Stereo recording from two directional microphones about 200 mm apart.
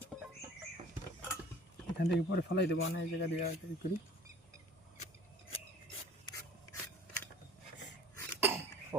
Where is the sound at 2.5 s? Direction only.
60° left (ahead or behind).